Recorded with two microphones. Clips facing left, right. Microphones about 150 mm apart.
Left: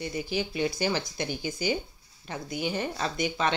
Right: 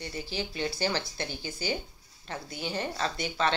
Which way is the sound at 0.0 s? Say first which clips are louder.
Left 5 dB; 15° left (ahead or behind).